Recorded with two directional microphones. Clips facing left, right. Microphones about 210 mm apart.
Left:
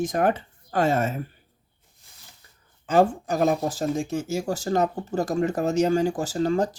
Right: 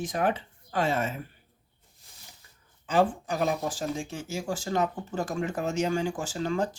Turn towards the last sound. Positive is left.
turn(degrees=40)  # may be behind; listen again after turning